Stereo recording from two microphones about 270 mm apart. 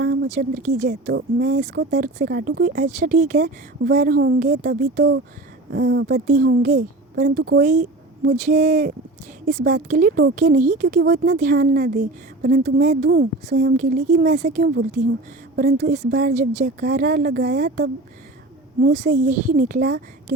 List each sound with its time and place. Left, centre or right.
0.0 s a woman's voice: right